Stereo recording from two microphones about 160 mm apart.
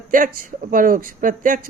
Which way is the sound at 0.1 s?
60° right (ahead or behind).